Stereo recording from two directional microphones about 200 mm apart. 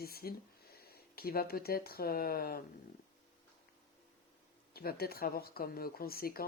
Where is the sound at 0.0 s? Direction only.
50° left (ahead or behind).